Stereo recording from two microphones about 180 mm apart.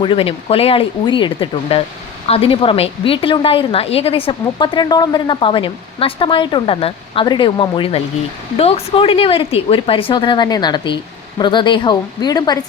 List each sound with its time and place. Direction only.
0.0 s a woman's voice: 30° left (ahead or behind)